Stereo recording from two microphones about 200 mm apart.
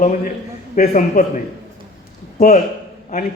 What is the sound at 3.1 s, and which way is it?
Speech, 50° left (ahead or behind).